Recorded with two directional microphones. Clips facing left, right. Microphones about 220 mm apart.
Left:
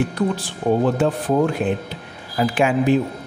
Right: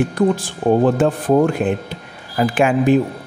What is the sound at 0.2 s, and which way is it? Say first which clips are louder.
Speech: right 5 dB; 45° right (ahead or behind).